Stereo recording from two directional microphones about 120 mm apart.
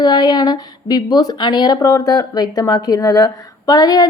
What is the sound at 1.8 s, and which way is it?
Speech, 30° left (ahead or behind).